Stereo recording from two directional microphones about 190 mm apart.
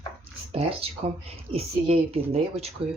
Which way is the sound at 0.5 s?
30° right (ahead or behind).